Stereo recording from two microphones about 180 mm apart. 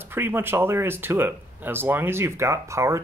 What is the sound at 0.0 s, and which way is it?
Speech, 10° right (ahead or behind).